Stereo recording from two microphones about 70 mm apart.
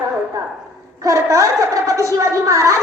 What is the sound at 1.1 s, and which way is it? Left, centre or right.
A woman's voice, right.